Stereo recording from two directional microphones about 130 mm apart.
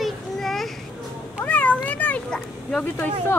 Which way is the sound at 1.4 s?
10° left (ahead or behind).